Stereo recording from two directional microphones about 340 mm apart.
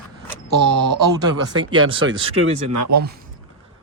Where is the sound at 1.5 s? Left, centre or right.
Right.